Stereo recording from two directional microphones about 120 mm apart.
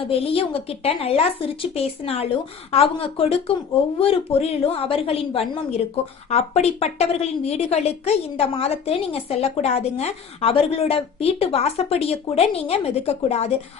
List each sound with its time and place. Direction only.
0.0 s a woman's voice: 50° left (ahead or behind)